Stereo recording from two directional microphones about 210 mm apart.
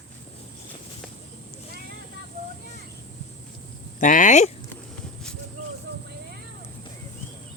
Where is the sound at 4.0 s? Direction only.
40° left (ahead or behind).